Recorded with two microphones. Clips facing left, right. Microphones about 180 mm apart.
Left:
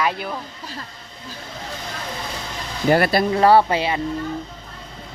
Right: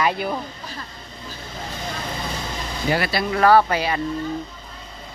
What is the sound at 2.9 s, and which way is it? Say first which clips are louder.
Speech: left 6 dB; 50° left (ahead or behind).